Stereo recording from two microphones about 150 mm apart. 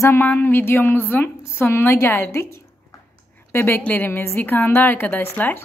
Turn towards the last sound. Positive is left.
turn(degrees=15)  # may be behind; listen again after turning